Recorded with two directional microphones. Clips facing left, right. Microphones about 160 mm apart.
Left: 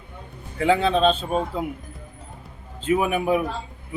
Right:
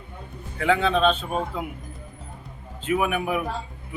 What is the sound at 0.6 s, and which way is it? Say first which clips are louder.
A man's voice: left 2 dB; 30° left (ahead or behind).